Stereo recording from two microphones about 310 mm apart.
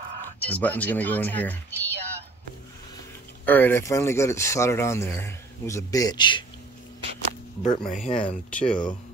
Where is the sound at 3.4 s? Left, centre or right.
Centre.